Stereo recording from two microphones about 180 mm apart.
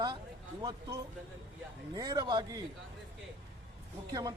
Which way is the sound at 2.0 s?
20° right (ahead or behind).